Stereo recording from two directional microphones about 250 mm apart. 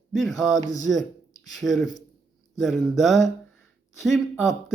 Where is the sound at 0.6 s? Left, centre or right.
Centre.